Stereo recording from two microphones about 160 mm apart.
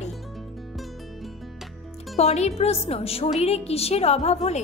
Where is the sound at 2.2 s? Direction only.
40° left (ahead or behind).